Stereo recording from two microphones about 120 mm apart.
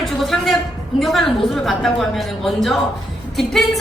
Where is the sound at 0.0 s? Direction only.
Centre (ahead or behind).